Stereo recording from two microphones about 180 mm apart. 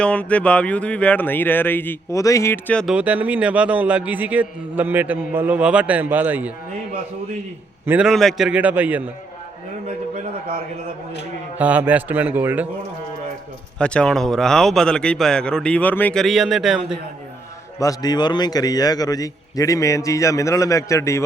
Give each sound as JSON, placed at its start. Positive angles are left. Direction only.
{"t": 0.0, "sound": "speech", "side_deg": 5}
{"t": 2.9, "sound": "a man's voice", "side_deg": -10}
{"t": 7.9, "sound": "a man's voice", "side_deg": -5}
{"t": 11.5, "sound": "a man's voice", "side_deg": -10}
{"t": 13.7, "sound": "a man's voice", "side_deg": 5}
{"t": 17.7, "sound": "a man's voice", "side_deg": 20}